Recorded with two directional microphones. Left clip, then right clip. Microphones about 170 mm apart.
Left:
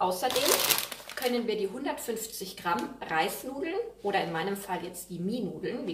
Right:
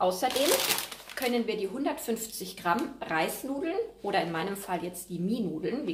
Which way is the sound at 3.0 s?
45° right (ahead or behind).